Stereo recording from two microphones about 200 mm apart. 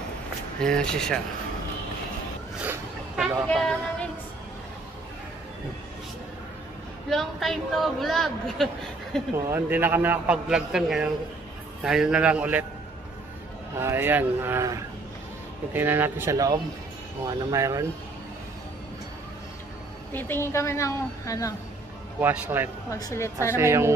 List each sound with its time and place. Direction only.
0.6 s a man's voice: 5° left (ahead or behind)
2.6 s a sound: 10° right (ahead or behind)
3.4 s a man's voice: 5° left (ahead or behind)
7.1 s a man's voice: centre (ahead or behind)
9.3 s a man's voice: 10° right (ahead or behind)
13.7 s speech: 10° right (ahead or behind)
20.1 s a woman's voice: 10° left (ahead or behind)
22.2 s speech: 10° right (ahead or behind)
22.8 s a woman's voice: 15° left (ahead or behind)
23.5 s speech: 10° right (ahead or behind)